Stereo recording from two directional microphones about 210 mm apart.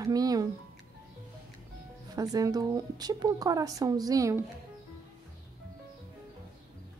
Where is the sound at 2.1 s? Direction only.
15° right (ahead or behind).